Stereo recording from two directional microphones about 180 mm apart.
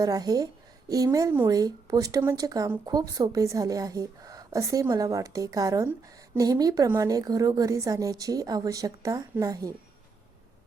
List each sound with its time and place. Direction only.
0.0 s a woman's voice: 20° right (ahead or behind)